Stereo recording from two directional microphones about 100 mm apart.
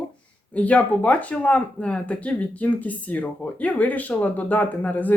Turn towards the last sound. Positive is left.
turn(degrees=15)  # may be behind; listen again after turning